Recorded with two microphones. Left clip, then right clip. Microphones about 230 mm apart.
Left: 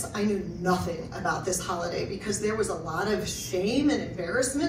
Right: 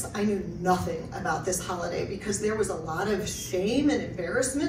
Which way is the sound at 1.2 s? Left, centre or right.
Centre.